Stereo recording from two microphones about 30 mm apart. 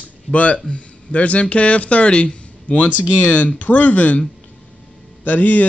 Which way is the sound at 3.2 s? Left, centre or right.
Left.